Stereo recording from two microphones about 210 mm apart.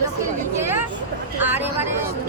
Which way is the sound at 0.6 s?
10° right (ahead or behind).